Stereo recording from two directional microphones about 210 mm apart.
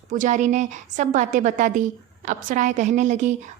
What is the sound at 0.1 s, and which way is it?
A woman's voice, 35° right (ahead or behind).